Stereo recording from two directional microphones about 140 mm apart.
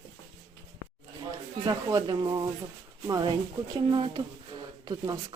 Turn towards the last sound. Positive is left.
turn(degrees=-30)  # may be behind; listen again after turning